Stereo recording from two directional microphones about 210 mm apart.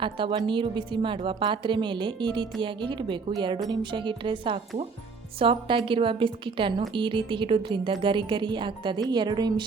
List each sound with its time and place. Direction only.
0.0 s a woman's voice: 25° right (ahead or behind)